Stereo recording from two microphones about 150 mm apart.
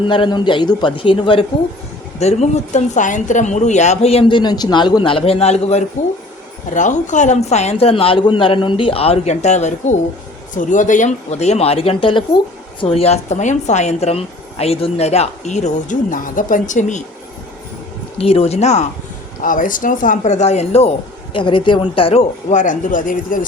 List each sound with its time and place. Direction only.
0.0 s speech: 35° left (ahead or behind)
2.1 s a woman's voice: 45° left (ahead or behind)
6.7 s a woman's voice: 55° left (ahead or behind)
18.2 s a woman's voice: 40° left (ahead or behind)
19.4 s speech: 65° left (ahead or behind); by 20.9 s 45° left (ahead or behind)
21.3 s speech: 35° left (ahead or behind); by 23.5 s 65° left (ahead or behind)